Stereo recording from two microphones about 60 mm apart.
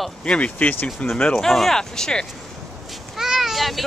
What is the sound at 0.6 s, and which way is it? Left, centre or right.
Speech, left.